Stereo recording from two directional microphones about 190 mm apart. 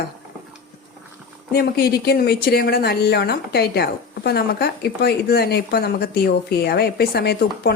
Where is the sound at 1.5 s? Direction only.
55° left (ahead or behind).